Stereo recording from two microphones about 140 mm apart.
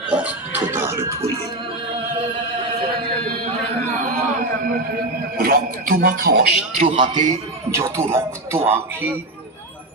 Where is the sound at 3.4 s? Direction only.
55° right (ahead or behind).